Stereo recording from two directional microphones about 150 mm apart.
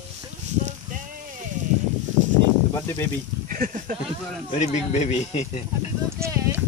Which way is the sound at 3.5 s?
60° right (ahead or behind).